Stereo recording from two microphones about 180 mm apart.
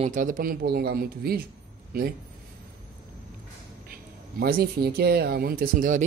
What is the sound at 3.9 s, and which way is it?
Speech, 55° right (ahead or behind).